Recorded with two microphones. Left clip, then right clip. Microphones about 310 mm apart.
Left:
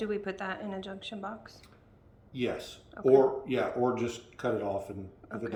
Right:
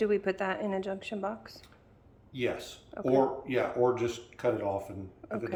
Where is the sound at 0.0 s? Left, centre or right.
Centre.